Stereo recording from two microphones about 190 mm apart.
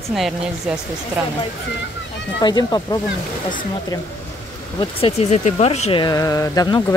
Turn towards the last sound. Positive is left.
turn(degrees=20)  # may be behind; listen again after turning